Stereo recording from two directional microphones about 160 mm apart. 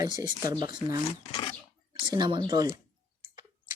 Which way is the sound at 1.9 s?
25° right (ahead or behind).